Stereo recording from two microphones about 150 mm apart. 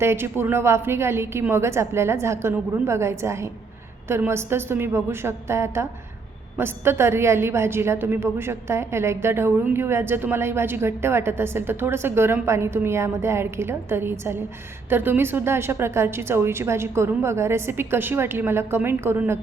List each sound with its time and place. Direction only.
0.0 s a woman's voice: 15° right (ahead or behind)